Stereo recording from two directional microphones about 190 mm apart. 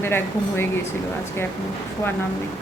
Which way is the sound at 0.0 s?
10° left (ahead or behind).